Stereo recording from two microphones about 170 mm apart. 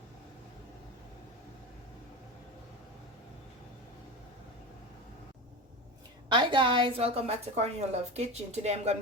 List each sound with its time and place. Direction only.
6.2 s a woman's voice: 30° right (ahead or behind)